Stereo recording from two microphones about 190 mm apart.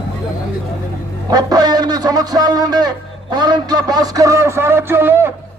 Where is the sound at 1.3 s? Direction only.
20° right (ahead or behind).